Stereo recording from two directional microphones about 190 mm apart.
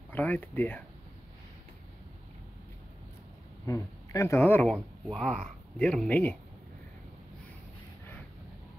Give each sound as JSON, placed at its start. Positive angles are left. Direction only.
{"t": 0.1, "sound": "speech", "side_deg": 10}
{"t": 3.6, "sound": "speech", "side_deg": 15}